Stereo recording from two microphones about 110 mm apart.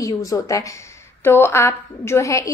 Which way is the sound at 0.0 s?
30° left (ahead or behind).